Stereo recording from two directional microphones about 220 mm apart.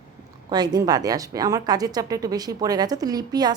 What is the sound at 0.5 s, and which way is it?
A woman's voice, 20° right (ahead or behind).